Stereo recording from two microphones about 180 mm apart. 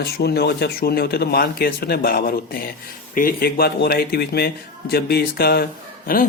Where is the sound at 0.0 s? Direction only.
65° left (ahead or behind).